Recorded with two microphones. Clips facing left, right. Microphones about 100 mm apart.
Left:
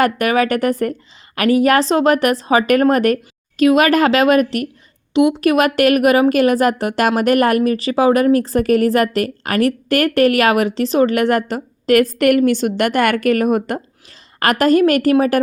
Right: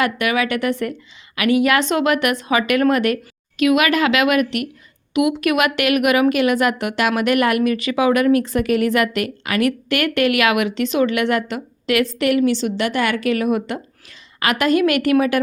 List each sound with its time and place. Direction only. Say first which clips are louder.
0.0 s speech: left 4 dB; 40° left (ahead or behind)